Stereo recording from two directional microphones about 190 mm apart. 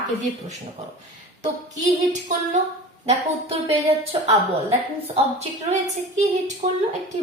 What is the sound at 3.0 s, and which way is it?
A woman's voice, 35° right (ahead or behind).